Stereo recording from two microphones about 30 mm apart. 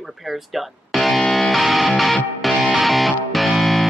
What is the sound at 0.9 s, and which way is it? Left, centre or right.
Music, centre.